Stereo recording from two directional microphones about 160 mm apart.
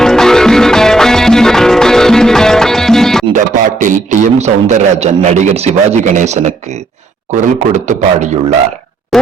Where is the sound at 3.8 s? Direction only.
50° right (ahead or behind).